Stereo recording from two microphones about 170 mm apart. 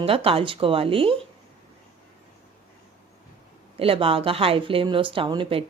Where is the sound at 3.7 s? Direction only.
35° right (ahead or behind).